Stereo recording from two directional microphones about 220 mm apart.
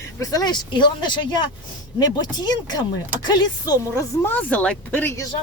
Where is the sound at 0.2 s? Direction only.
15° left (ahead or behind).